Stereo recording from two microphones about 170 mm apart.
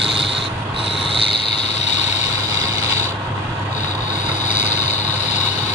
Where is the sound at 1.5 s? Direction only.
40° left (ahead or behind).